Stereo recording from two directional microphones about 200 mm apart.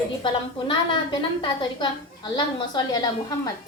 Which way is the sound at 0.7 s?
20° left (ahead or behind).